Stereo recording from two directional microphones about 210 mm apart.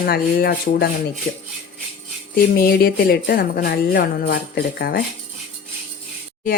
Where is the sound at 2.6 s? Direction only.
45° left (ahead or behind).